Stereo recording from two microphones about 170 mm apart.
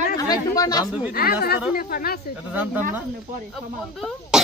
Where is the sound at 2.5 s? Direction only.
10° right (ahead or behind).